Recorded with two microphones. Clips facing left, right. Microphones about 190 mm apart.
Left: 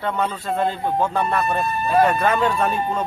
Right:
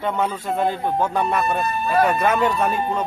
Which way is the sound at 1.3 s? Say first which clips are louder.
Even; centre (ahead or behind).